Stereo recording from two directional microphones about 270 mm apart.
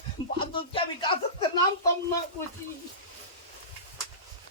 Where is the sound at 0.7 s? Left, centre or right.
Centre.